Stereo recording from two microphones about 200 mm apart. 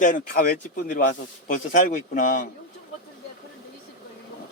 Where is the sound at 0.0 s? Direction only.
45° left (ahead or behind).